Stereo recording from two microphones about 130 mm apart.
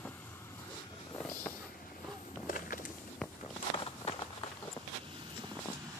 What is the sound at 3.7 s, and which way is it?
Walk, 45° left (ahead or behind).